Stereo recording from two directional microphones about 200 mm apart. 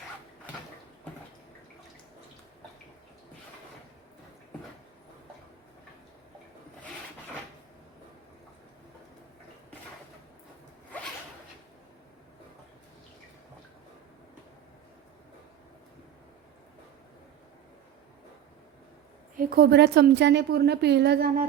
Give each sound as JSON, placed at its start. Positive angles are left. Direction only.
{"t": 19.4, "sound": "a woman's voice", "side_deg": -50}